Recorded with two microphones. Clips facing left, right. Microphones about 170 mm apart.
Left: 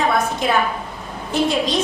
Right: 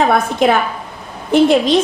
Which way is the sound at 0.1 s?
60° right (ahead or behind).